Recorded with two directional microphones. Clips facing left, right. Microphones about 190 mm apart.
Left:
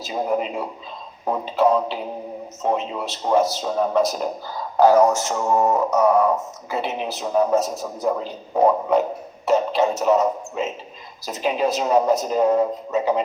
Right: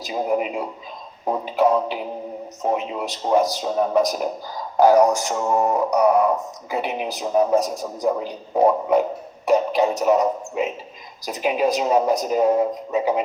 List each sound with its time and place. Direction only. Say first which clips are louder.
0.0 s speech: right 1 dB; 10° right (ahead or behind)
9.5 s speech: right 1 dB; 15° right (ahead or behind)